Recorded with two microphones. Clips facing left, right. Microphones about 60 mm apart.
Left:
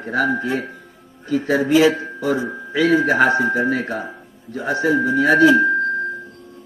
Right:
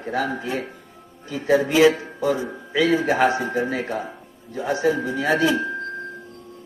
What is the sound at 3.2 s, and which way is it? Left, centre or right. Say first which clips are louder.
A man's voice: left 4 dB; left.